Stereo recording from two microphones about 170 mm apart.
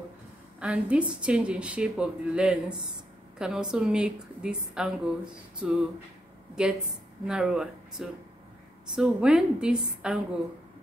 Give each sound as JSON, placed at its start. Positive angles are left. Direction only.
{"t": 0.6, "sound": "a woman's voice", "side_deg": -5}